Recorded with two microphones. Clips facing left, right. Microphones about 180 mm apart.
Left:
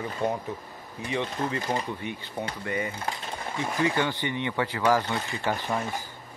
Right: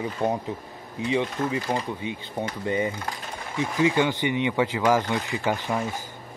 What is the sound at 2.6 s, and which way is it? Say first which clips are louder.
Speech: right 6 dB; 25° right (ahead or behind).